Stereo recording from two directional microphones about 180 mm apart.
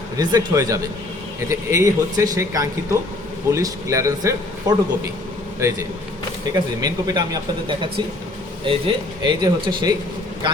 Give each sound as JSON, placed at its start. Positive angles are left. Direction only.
{"t": 0.2, "sound": "a man's voice", "side_deg": -20}